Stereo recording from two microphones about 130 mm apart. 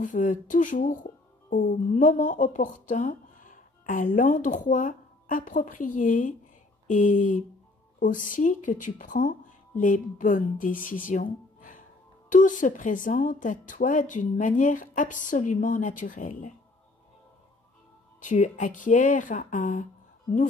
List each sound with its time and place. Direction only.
0.0 s a woman's voice: 80° left
6.9 s a sound: 80° left
8.0 s a woman's voice: 90° left
12.3 s a woman's voice: 80° left
18.2 s a woman's voice: 75° left (ahead or behind)